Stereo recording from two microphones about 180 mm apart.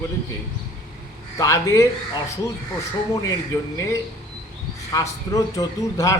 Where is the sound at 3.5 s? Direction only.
15° left (ahead or behind).